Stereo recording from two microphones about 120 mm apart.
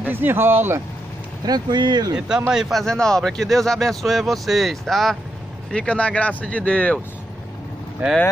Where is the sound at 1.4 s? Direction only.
35° right (ahead or behind).